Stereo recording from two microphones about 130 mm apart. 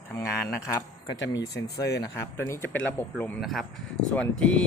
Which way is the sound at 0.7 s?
30° left (ahead or behind).